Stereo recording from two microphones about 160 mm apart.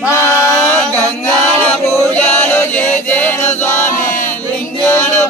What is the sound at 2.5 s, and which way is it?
Male singing, 10° left (ahead or behind).